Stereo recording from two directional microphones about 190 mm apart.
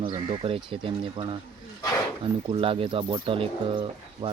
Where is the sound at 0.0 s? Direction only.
25° right (ahead or behind).